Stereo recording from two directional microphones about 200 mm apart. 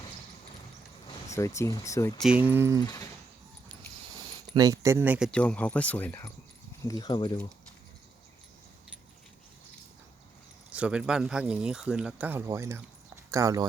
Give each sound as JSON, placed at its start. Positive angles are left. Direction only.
{"t": 1.0, "sound": "speech", "side_deg": 15}
{"t": 2.1, "sound": "speech", "side_deg": -5}
{"t": 2.8, "sound": "a sound", "side_deg": 15}
{"t": 4.5, "sound": "speech", "side_deg": -15}
{"t": 5.3, "sound": "speech", "side_deg": 5}
{"t": 10.8, "sound": "speech", "side_deg": -5}